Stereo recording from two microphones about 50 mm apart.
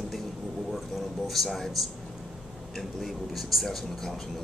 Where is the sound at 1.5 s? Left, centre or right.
Centre.